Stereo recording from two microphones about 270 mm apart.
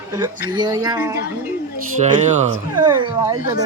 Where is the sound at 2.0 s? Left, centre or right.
Right.